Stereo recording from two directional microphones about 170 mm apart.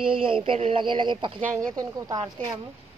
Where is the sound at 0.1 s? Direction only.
30° right (ahead or behind).